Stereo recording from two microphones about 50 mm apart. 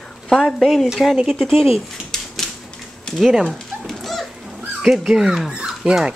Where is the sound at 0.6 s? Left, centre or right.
Centre.